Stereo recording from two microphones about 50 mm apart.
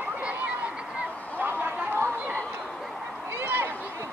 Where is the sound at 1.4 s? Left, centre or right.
Right.